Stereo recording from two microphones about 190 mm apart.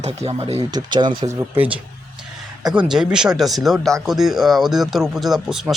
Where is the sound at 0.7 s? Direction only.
25° right (ahead or behind).